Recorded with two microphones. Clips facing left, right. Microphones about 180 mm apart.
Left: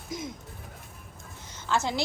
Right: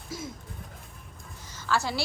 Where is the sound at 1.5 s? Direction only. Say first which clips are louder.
Left 1 dB; 20° left (ahead or behind).